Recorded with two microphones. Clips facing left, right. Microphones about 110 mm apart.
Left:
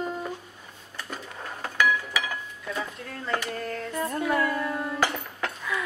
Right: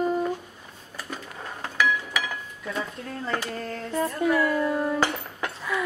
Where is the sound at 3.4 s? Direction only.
30° right (ahead or behind).